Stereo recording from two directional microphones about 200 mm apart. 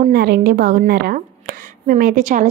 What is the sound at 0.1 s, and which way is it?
A woman's voice, 50° right (ahead or behind).